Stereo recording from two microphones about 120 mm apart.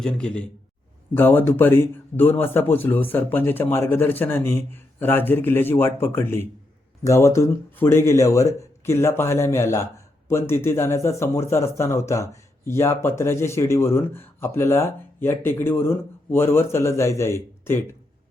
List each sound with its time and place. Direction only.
0.0 s a man's voice: 10° left (ahead or behind)